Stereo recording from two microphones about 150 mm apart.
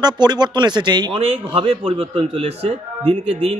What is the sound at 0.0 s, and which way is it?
A man's voice, 30° right (ahead or behind).